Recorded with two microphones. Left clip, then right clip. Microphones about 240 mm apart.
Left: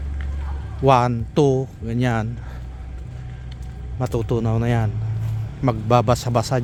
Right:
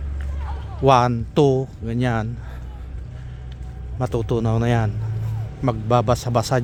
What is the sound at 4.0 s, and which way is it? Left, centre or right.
Speech, centre.